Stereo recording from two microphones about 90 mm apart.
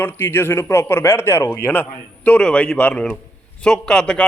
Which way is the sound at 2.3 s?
10° left (ahead or behind).